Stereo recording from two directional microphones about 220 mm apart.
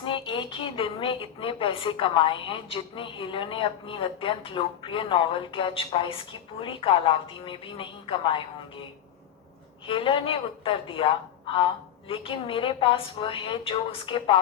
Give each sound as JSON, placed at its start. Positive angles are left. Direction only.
{"t": 0.0, "sound": "a woman's voice", "side_deg": 25}
{"t": 9.8, "sound": "a woman's voice", "side_deg": 25}